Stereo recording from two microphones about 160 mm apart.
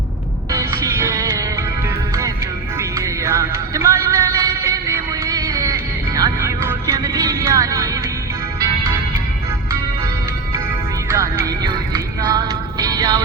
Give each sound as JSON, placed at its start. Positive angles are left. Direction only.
{"t": 0.5, "sound": "music", "side_deg": -20}
{"t": 2.7, "sound": "music", "side_deg": -20}
{"t": 11.1, "sound": "music", "side_deg": -20}